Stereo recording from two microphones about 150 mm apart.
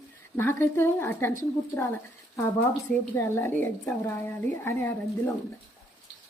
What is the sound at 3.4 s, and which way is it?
Speech, 15° left (ahead or behind).